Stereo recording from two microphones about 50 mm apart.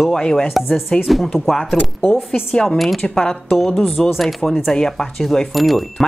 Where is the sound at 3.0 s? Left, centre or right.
Centre.